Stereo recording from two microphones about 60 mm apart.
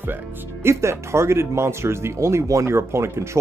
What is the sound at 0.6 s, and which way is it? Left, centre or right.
Speech, right.